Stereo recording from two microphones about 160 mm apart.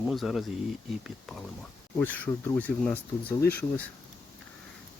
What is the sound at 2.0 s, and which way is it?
Speech, 10° left (ahead or behind).